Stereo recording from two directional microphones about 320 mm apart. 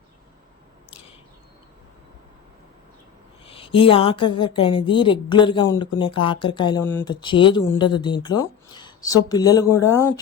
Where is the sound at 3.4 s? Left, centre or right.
Centre.